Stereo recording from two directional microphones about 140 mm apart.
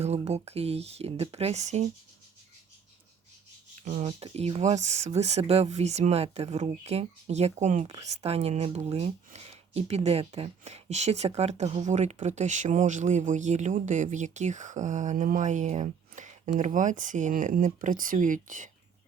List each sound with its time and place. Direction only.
0.0 s speech: 50° right (ahead or behind)
3.8 s speech: 50° right (ahead or behind); by 18.7 s 65° right (ahead or behind)